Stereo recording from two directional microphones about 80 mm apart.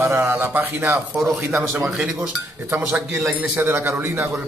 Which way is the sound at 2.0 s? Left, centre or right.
Centre.